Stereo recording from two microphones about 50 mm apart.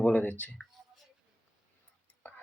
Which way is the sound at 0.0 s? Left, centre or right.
Left.